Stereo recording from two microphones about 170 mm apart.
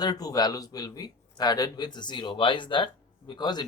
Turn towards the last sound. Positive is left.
turn(degrees=25)  # may be behind; listen again after turning